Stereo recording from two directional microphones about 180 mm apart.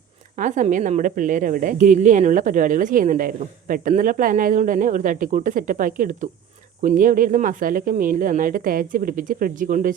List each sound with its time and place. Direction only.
0.3 s a woman's voice: 45° right (ahead or behind)